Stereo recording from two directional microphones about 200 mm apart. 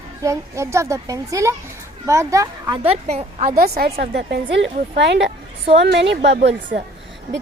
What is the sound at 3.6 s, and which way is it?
A woman's voice, 50° right (ahead or behind).